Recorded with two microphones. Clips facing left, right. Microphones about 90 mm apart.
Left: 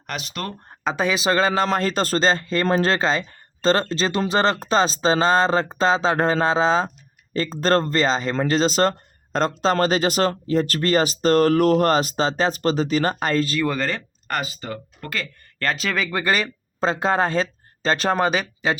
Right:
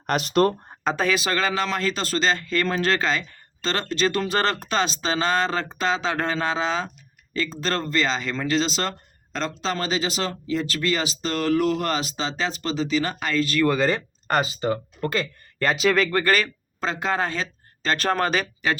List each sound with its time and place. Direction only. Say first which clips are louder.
0.1 s speech: right 10 dB; 40° right (ahead or behind)
0.9 s speech: left 4 dB; 20° left (ahead or behind); by 13.6 s 40° left (ahead or behind)
13.7 s speech: right 3 dB; 5° right (ahead or behind)
14.3 s speech: right 5 dB; 25° right (ahead or behind)
15.5 s speech: right 4 dB; 5° right (ahead or behind)
16.1 s speech: right 1 dB; 20° left (ahead or behind)
16.8 s speech: left 5 dB; 35° left (ahead or behind)
17.9 s speech: left 2 dB; 20° left (ahead or behind)